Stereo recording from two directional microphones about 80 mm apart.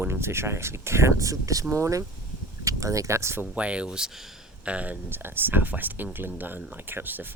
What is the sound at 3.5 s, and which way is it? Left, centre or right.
Speech, centre.